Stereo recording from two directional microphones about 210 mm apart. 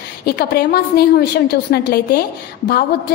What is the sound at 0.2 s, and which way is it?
A woman's voice, 50° left (ahead or behind).